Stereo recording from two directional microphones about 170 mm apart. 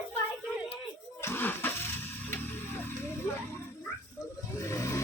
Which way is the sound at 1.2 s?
15° left (ahead or behind).